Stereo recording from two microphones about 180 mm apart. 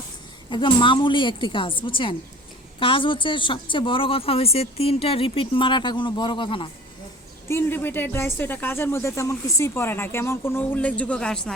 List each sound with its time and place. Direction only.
0.5 s a woman's voice: 25° left (ahead or behind)
7.4 s speech: 15° left (ahead or behind)